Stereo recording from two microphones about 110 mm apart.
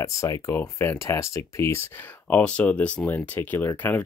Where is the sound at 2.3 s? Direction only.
10° left (ahead or behind).